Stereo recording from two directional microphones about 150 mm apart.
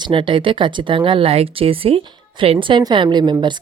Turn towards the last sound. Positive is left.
turn(degrees=-30)  # may be behind; listen again after turning